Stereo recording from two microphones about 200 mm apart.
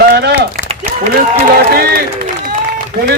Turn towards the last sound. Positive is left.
turn(degrees=-45)  # may be behind; listen again after turning